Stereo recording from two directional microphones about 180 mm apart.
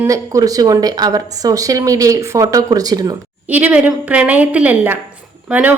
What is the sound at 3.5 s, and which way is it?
Speech, 10° right (ahead or behind).